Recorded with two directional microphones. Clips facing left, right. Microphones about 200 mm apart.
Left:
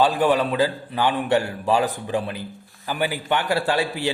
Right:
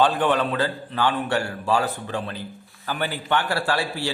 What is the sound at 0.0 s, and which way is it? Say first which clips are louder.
A man's voice: left 2 dB; 10° left (ahead or behind).